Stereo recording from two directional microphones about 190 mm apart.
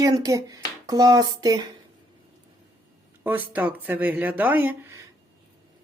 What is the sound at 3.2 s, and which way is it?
Speech, 10° right (ahead or behind).